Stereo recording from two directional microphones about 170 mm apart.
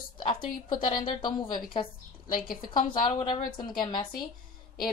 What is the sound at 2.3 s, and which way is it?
Speech, 55° left (ahead or behind).